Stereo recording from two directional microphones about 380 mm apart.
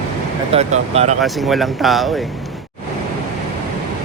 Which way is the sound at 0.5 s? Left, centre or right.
Centre.